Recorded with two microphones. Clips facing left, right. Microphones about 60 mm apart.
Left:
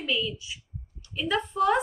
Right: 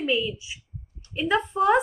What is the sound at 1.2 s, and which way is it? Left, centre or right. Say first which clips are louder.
Speech: right 3 dB; centre.